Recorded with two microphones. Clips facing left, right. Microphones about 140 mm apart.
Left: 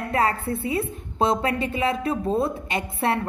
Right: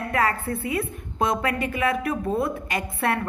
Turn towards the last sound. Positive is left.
turn(degrees=25)  # may be behind; listen again after turning